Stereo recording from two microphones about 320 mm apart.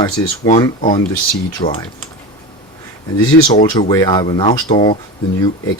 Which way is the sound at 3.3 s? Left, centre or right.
Left.